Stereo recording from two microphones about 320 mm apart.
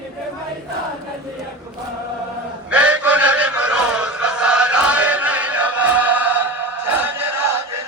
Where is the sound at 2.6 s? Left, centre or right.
Centre.